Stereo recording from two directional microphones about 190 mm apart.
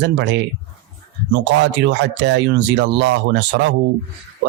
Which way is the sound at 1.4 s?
70° right (ahead or behind).